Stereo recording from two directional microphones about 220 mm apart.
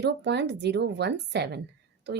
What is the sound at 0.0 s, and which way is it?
Speech, 50° right (ahead or behind).